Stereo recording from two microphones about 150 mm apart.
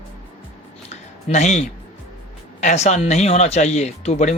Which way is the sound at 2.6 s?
50° left (ahead or behind).